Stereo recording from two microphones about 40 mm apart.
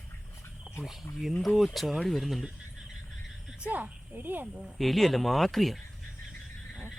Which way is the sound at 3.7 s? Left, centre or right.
Right.